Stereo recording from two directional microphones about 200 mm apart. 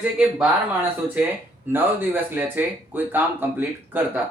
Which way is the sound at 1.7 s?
10° right (ahead or behind).